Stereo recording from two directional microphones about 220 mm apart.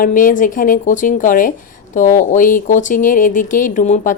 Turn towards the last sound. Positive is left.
turn(degrees=35)  # may be behind; listen again after turning